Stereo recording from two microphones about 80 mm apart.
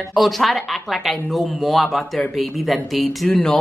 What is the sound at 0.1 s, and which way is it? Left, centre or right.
Speech, centre.